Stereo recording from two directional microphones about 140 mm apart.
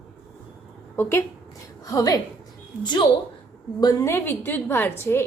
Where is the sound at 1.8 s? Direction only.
25° left (ahead or behind).